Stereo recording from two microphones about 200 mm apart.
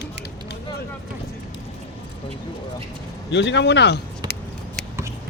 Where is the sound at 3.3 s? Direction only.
60° left (ahead or behind).